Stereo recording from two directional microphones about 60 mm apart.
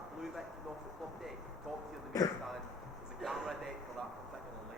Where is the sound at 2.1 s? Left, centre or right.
Left.